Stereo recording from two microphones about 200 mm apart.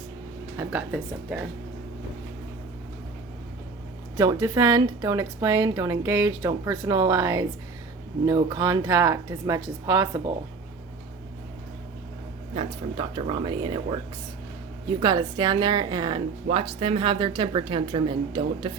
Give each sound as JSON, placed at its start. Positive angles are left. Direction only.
{"t": 0.5, "sound": "speech", "side_deg": -10}
{"t": 4.2, "sound": "a woman's voice", "side_deg": -20}
{"t": 12.5, "sound": "a woman's voice", "side_deg": -30}
{"t": 14.8, "sound": "a woman's voice", "side_deg": -20}